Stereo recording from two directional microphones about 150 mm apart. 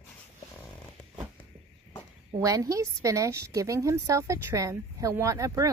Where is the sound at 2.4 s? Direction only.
20° right (ahead or behind).